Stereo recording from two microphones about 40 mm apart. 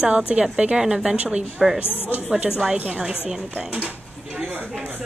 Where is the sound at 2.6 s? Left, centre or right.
Centre.